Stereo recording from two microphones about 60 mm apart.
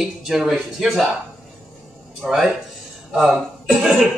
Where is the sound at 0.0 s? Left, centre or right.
Centre.